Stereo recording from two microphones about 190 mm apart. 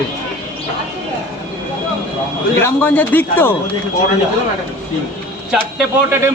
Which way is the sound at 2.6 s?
10° left (ahead or behind).